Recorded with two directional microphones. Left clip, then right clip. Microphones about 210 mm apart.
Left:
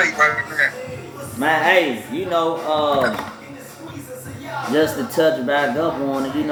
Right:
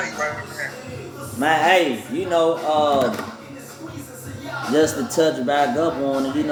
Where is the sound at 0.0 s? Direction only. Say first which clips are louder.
Left 9 dB; 45° left (ahead or behind).